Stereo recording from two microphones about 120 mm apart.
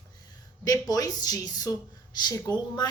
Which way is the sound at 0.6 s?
30° left (ahead or behind).